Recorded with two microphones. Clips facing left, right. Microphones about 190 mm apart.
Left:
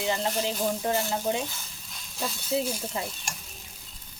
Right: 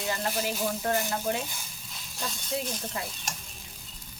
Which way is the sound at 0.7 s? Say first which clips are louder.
Left 1 dB; 10° left (ahead or behind).